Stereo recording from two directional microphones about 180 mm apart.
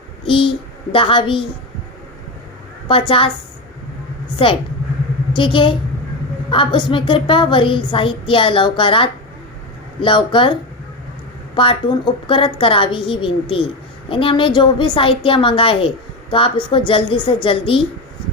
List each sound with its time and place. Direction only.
0.3 s a child's voice: 30° left (ahead or behind)
2.8 s a woman's voice: 30° left (ahead or behind)
4.4 s a woman's voice: 30° left (ahead or behind)
11.5 s a woman's voice: 30° left (ahead or behind)